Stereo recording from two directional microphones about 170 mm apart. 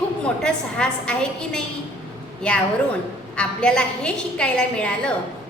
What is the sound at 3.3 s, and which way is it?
A woman's voice, 5° left (ahead or behind).